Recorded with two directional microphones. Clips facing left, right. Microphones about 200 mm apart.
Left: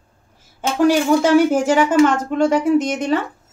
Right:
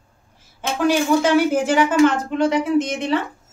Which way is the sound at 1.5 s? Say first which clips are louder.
Left 2 dB; 45° left (ahead or behind).